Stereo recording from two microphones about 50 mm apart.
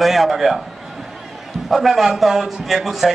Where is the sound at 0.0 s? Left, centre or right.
Centre.